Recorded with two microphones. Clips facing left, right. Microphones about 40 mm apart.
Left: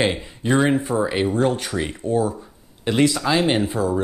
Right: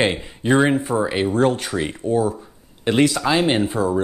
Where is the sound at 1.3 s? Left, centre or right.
Right.